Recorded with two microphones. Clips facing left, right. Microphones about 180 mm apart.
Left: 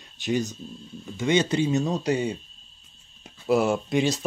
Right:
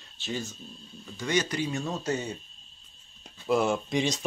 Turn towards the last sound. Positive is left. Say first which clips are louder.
# left 4 dB
turn(degrees=5)  # may be behind; listen again after turning